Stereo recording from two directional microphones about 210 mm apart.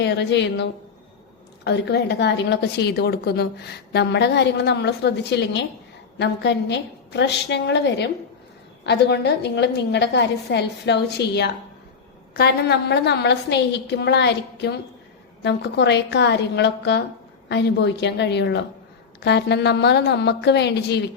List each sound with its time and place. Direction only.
0.0 s a woman's voice: 55° left (ahead or behind)